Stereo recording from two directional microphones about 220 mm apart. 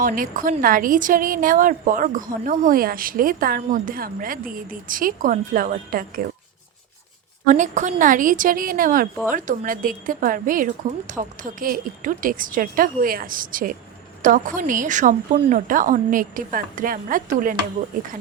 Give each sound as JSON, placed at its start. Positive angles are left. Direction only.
{"t": 0.0, "sound": "a woman's voice", "side_deg": -40}
{"t": 7.4, "sound": "a woman's voice", "side_deg": -35}